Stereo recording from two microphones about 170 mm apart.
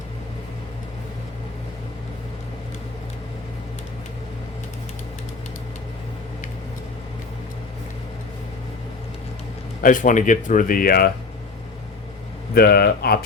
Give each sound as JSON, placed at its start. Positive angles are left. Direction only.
{"t": 9.8, "sound": "speech", "side_deg": 50}
{"t": 12.5, "sound": "speech", "side_deg": 65}